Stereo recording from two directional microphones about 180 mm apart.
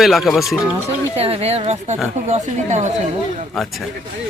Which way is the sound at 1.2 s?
35° right (ahead or behind).